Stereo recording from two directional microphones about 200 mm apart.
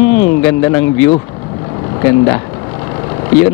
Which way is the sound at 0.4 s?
15° left (ahead or behind).